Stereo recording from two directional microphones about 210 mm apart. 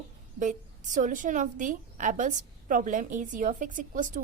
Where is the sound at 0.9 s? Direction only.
35° right (ahead or behind).